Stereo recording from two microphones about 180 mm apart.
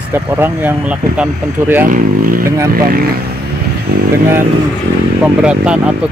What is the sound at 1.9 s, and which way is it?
Speech, 50° right (ahead or behind).